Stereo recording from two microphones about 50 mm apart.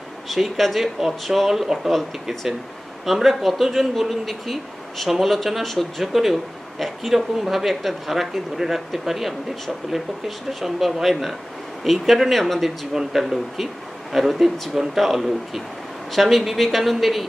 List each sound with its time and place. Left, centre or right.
0.3 s speech: centre